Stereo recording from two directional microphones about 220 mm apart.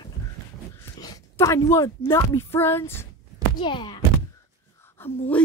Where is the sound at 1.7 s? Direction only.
10° left (ahead or behind).